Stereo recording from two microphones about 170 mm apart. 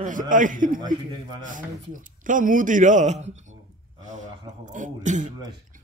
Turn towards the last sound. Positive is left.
turn(degrees=-45)  # may be behind; listen again after turning